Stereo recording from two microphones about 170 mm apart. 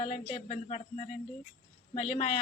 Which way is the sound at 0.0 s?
40° left (ahead or behind).